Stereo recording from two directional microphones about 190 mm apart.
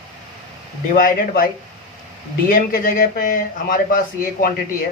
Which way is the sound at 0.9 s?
50° left (ahead or behind).